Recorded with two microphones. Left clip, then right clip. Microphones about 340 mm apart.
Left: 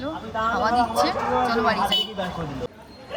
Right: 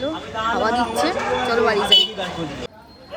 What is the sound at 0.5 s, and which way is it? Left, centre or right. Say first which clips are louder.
A woman's voice: right 1 dB; centre.